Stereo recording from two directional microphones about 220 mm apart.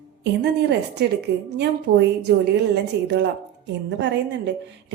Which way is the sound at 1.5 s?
50° right (ahead or behind).